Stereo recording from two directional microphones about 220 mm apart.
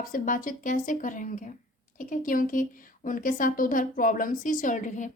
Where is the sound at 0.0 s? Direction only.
35° left (ahead or behind).